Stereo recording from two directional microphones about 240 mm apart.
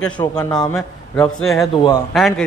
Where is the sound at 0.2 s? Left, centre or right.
Centre.